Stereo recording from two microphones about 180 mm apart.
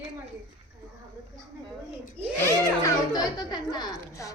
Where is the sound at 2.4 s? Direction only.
15° left (ahead or behind).